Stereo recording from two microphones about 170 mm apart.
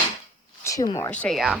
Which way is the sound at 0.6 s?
20° left (ahead or behind).